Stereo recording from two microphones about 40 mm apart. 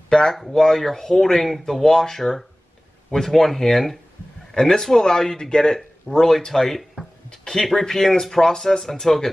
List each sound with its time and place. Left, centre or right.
0.1 s speech: centre
7.2 s a sound: centre
7.8 s speech: centre